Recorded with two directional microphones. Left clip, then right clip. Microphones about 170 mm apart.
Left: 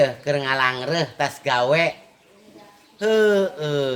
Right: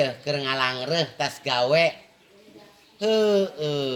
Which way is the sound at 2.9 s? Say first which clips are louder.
Left 3 dB; 25° left (ahead or behind).